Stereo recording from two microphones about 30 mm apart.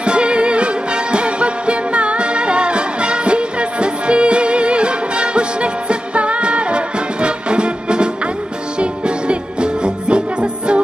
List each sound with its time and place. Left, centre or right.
0.0 s music: right